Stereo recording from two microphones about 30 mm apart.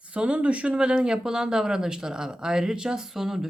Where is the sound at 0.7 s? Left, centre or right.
Right.